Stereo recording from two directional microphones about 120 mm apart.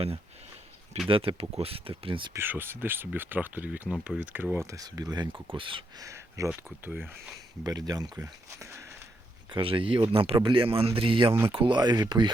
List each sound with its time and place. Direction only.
1.0 s speech: 45° right (ahead or behind)
2.3 s speech: 15° right (ahead or behind); by 5.8 s 45° right (ahead or behind)
6.0 s speech: 25° right (ahead or behind)
7.6 s speech: 30° right (ahead or behind)
9.5 s speech: 45° right (ahead or behind)